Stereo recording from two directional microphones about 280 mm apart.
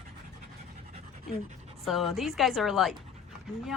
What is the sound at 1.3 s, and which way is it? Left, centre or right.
Speech, centre.